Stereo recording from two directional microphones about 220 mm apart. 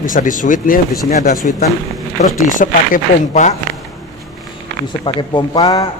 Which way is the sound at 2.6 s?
35° left (ahead or behind).